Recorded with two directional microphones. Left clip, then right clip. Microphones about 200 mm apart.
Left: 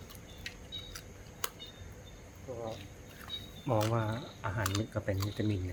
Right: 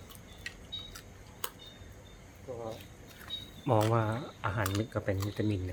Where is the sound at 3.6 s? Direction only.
30° right (ahead or behind).